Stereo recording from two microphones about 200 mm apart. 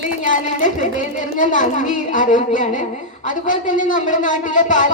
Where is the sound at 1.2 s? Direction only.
40° left (ahead or behind).